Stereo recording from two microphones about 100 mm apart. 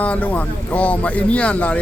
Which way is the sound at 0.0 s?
15° left (ahead or behind).